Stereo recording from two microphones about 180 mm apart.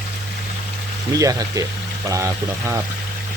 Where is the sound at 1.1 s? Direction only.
20° right (ahead or behind).